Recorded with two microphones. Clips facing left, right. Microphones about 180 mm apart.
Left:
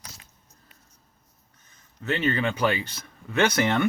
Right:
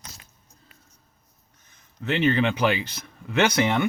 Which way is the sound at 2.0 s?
25° right (ahead or behind).